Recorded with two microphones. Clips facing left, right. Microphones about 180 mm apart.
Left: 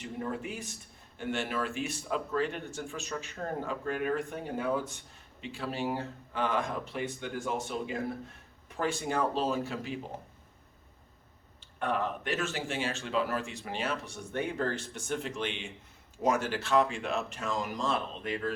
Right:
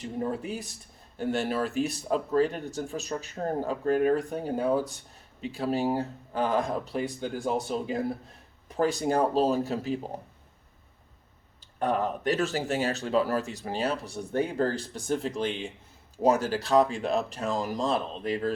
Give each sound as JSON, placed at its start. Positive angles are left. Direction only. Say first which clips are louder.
{"t": 0.0, "sound": "speech", "louder": "right 5 dB", "side_deg": -35}
{"t": 11.8, "sound": "speech", "louder": "right 5 dB", "side_deg": -35}